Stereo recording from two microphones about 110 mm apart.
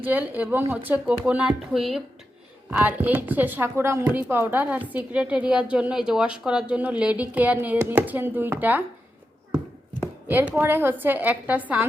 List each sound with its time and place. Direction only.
0.0 s a woman's voice: 15° right (ahead or behind)
2.6 s a woman's voice: 15° right (ahead or behind)
10.2 s a woman's voice: 15° right (ahead or behind)